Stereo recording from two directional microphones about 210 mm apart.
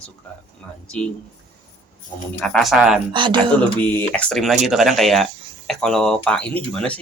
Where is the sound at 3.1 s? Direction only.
20° right (ahead or behind).